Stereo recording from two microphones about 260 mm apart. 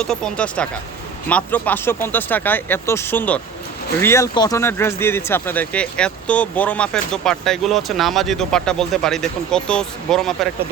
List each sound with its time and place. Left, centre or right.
0.0 s speech: centre